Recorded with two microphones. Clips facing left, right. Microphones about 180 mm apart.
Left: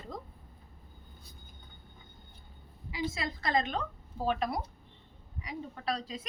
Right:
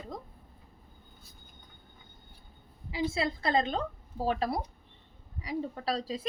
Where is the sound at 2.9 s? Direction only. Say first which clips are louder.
Right 5 dB; 30° right (ahead or behind).